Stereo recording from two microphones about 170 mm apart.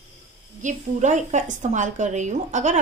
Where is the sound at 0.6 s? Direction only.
45° right (ahead or behind).